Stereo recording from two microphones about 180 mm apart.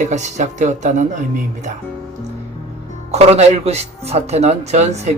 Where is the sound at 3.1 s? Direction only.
35° right (ahead or behind).